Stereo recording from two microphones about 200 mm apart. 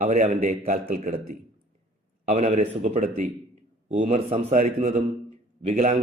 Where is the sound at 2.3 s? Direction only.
35° right (ahead or behind).